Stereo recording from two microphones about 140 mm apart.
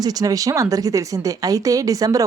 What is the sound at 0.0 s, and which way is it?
A woman's voice, 25° right (ahead or behind).